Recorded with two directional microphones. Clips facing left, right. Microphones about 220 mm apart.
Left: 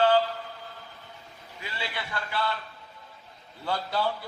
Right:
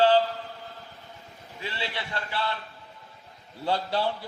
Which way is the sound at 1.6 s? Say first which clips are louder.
Right 2 dB; 30° right (ahead or behind).